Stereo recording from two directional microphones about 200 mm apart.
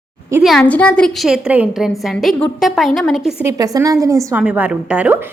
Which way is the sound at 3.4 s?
15° right (ahead or behind).